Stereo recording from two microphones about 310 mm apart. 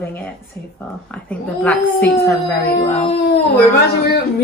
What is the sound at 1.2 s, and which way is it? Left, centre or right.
Speech, centre.